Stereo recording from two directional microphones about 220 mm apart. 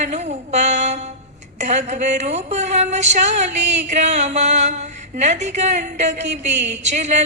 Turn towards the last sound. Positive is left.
turn(degrees=-30)  # may be behind; listen again after turning